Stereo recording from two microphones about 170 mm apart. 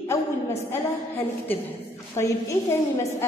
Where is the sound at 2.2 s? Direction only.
20° left (ahead or behind).